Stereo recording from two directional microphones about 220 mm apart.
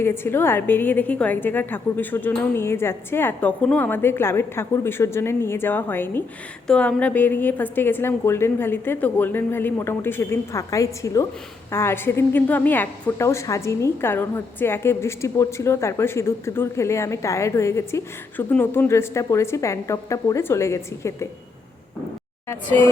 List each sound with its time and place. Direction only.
0.0 s a woman's voice: 10° left (ahead or behind)
22.4 s a woman's voice: 10° left (ahead or behind)